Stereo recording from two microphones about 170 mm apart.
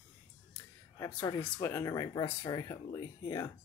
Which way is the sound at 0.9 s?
15° left (ahead or behind).